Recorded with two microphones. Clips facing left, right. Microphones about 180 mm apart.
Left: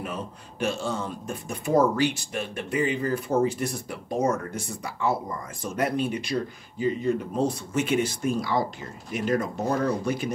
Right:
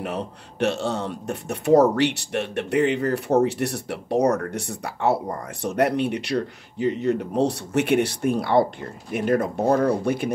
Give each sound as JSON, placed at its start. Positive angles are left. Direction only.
{"t": 0.0, "sound": "speech", "side_deg": -70}